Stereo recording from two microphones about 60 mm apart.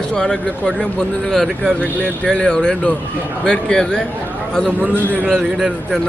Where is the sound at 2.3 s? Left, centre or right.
Centre.